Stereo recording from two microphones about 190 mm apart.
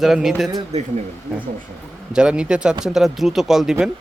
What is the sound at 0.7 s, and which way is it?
Speech, 35° right (ahead or behind).